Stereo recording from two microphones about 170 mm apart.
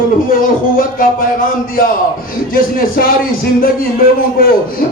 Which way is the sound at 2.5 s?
55° left (ahead or behind).